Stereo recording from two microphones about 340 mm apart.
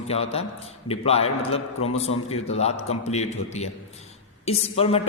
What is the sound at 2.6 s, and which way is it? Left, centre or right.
A man's voice, centre.